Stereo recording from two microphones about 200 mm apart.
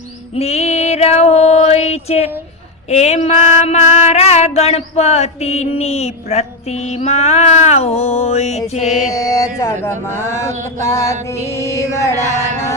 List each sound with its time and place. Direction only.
0.3 s female singing: 30° left (ahead or behind)
2.9 s a sound: 35° left (ahead or behind)
9.1 s mantra: 15° left (ahead or behind)